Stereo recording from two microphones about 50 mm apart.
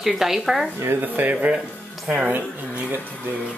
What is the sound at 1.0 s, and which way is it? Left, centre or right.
Speech, right.